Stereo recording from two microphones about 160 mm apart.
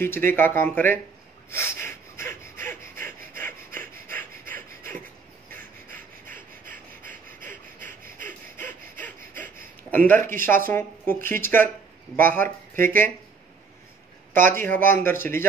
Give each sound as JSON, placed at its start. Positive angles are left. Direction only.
{"t": 0.0, "sound": "speech", "side_deg": 15}
{"t": 1.5, "sound": "a sound", "side_deg": 15}
{"t": 5.5, "sound": "breathing", "side_deg": 10}
{"t": 6.6, "sound": "breathing", "side_deg": -55}
{"t": 8.3, "sound": "gasp", "side_deg": 10}
{"t": 9.8, "sound": "speech", "side_deg": 10}
{"t": 14.3, "sound": "a man's voice", "side_deg": 15}